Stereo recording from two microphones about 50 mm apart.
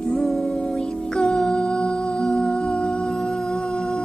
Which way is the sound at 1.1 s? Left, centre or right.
Centre.